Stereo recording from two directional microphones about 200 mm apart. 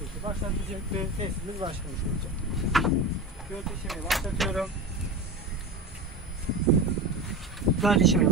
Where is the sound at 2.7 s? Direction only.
Centre (ahead or behind).